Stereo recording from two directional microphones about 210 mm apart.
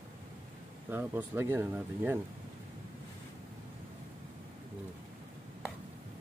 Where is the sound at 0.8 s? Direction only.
10° right (ahead or behind).